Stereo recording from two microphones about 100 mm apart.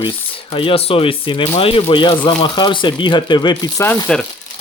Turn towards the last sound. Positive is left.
turn(degrees=10)  # may be behind; listen again after turning